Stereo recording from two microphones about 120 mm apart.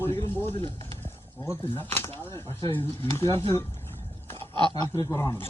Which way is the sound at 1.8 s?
15° left (ahead or behind).